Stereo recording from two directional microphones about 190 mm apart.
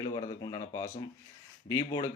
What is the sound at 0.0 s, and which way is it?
Speech, 20° left (ahead or behind).